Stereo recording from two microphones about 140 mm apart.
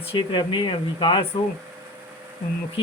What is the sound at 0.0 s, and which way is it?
Speech, 40° left (ahead or behind).